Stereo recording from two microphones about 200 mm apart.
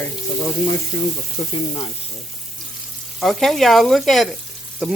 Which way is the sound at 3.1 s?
Centre (ahead or behind).